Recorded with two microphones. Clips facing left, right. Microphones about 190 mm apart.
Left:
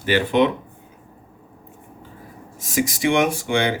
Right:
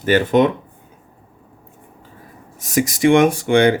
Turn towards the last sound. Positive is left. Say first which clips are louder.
# right 7 dB
turn(degrees=-55)  # may be behind; listen again after turning